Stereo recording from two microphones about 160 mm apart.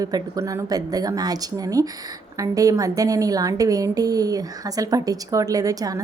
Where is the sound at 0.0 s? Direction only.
20° right (ahead or behind).